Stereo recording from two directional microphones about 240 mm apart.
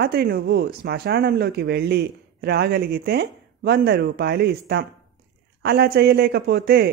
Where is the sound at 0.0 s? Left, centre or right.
Right.